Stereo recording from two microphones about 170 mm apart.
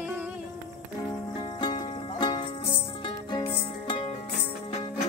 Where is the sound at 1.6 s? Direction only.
25° left (ahead or behind).